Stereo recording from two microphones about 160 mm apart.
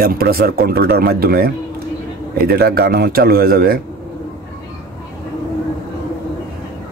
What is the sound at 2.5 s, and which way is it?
A man's voice, 80° right.